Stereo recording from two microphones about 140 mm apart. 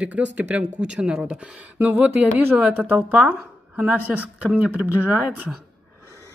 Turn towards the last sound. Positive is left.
turn(degrees=-10)  # may be behind; listen again after turning